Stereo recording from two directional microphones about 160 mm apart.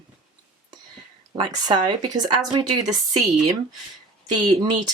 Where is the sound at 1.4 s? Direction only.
25° right (ahead or behind).